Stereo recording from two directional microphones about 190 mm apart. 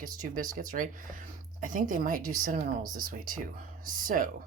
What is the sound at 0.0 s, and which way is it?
Speech, 45° right (ahead or behind).